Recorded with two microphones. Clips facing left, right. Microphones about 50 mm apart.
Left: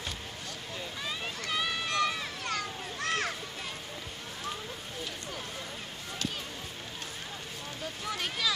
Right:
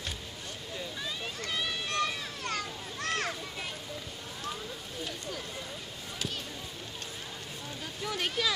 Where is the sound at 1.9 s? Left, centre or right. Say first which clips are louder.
Left 2 dB; left.